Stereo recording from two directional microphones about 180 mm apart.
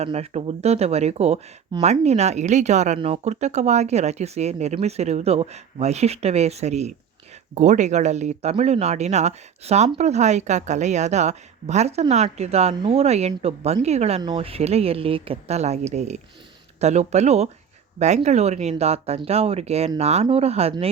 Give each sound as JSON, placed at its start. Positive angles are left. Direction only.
{"t": 0.0, "sound": "speech", "side_deg": -35}